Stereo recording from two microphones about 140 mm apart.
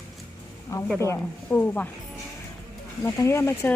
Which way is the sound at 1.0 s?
15° left (ahead or behind).